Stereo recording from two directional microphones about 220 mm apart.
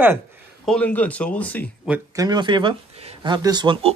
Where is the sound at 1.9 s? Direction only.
15° right (ahead or behind).